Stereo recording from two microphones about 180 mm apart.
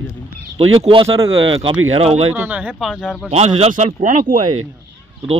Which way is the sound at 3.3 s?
35° right (ahead or behind).